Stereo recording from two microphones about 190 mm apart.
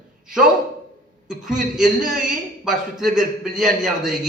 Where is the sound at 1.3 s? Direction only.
5° right (ahead or behind).